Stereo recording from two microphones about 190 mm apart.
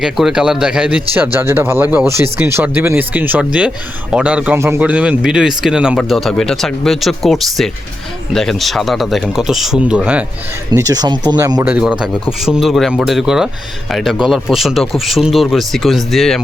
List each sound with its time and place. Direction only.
0.0 s a man's voice: 5° right (ahead or behind)
10.7 s speech: 20° right (ahead or behind)
11.7 s a man's voice: 5° right (ahead or behind)